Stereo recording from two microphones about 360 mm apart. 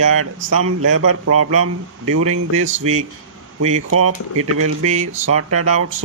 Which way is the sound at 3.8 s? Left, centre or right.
Right.